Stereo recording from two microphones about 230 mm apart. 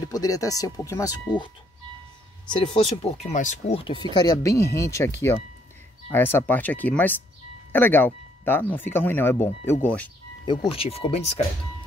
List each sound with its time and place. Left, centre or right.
0.1 s speech: centre
2.5 s speech: left; by 10.0 s centre
10.4 s speech: left